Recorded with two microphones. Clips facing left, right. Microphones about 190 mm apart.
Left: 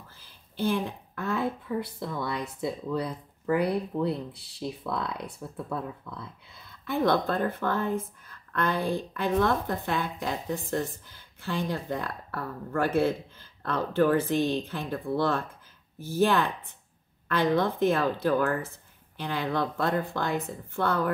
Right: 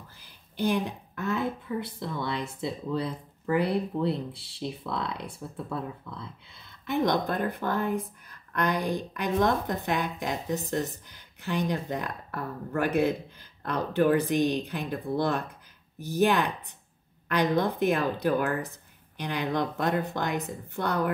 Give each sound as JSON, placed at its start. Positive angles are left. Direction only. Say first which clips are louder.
{"t": 0.2, "sound": "a woman's voice", "louder": "right 1 dB", "side_deg": -15}
{"t": 6.9, "sound": "speech", "louder": "left 1 dB", "side_deg": -20}